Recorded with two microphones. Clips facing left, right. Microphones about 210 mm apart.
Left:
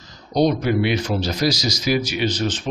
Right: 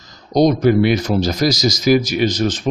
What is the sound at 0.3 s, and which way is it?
Speech, 45° right (ahead or behind).